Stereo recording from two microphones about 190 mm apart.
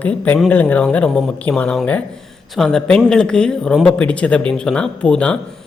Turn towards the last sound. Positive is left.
turn(degrees=5)  # may be behind; listen again after turning